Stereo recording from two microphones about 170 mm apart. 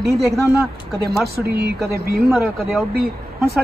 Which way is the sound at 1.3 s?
70° right (ahead or behind).